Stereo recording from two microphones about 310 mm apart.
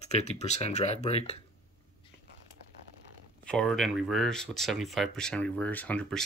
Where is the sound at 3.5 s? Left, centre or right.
Centre.